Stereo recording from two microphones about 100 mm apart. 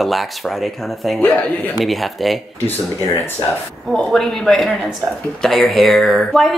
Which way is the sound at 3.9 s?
5° left (ahead or behind).